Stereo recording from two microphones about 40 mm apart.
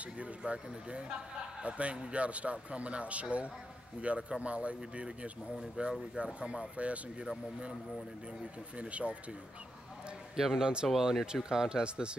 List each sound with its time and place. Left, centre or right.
0.5 s a man's voice: right
6.8 s a man's voice: right
8.7 s a man's voice: right
10.3 s a man's voice: centre